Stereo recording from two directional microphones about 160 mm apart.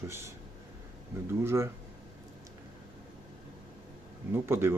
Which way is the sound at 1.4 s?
15° right (ahead or behind).